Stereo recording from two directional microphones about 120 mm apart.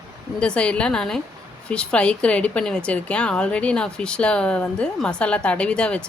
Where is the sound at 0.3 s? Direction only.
10° left (ahead or behind).